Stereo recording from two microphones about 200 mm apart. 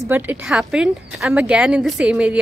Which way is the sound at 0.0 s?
10° right (ahead or behind).